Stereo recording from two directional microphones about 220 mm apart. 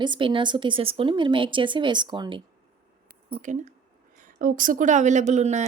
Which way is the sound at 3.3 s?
35° right (ahead or behind).